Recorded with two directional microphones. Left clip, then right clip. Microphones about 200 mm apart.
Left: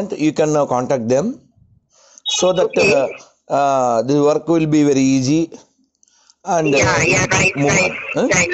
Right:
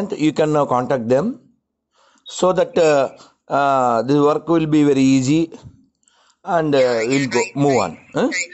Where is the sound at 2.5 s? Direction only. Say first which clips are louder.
Even; 5° right (ahead or behind).